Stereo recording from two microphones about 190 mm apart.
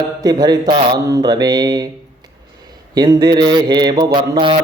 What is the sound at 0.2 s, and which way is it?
Mantra, 20° right (ahead or behind).